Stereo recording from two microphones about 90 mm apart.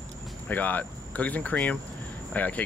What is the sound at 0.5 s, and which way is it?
Speech, 20° left (ahead or behind).